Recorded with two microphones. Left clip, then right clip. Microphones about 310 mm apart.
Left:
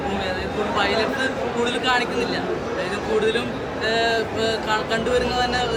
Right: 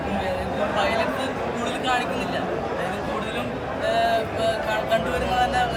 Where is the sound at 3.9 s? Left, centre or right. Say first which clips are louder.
Even; centre.